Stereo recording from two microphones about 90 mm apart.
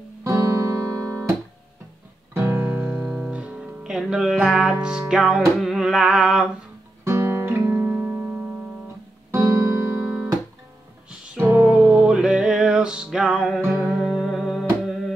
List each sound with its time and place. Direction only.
0.2 s music: 40° right (ahead or behind)
2.3 s music: 25° right (ahead or behind)
2.8 s music: 15° right (ahead or behind)
7.1 s guitar: 30° right (ahead or behind)
9.3 s music: 35° right (ahead or behind)
11.3 s music: 20° right (ahead or behind); by 15.1 s centre (ahead or behind)